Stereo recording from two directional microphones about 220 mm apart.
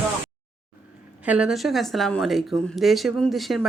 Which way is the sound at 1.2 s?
5° right (ahead or behind).